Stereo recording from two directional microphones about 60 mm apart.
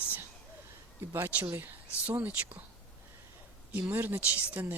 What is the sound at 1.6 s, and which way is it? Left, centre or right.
Speech, right.